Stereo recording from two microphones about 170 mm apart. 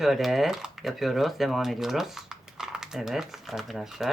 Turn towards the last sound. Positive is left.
turn(degrees=0)  # may be behind; listen again after turning